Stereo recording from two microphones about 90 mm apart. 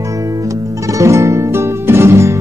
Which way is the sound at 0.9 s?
35° right (ahead or behind).